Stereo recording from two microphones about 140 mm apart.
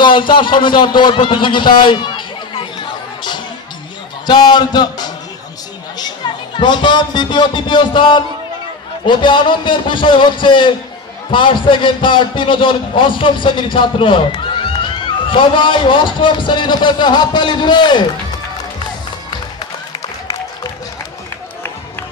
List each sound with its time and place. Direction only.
0.0 s a man's voice: 35° left (ahead or behind)